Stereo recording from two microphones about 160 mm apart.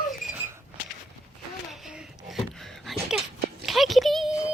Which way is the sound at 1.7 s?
5° right (ahead or behind).